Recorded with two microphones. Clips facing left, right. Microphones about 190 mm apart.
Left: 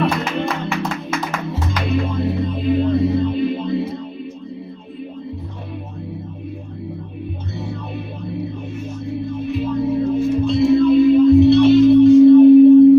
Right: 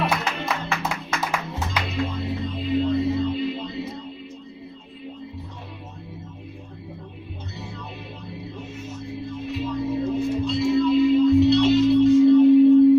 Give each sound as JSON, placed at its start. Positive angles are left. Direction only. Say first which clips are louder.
{"t": 0.0, "sound": "music", "louder": "left 6 dB", "side_deg": -5}
{"t": 1.9, "sound": "music", "louder": "left 10 dB", "side_deg": 50}
{"t": 9.5, "sound": "music", "louder": "left 6 dB", "side_deg": 55}